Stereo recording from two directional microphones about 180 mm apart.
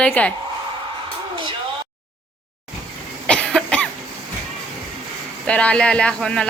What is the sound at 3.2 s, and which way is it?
Cough, 5° left (ahead or behind).